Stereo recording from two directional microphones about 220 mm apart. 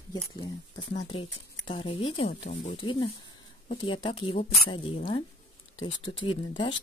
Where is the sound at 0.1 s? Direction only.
20° left (ahead or behind).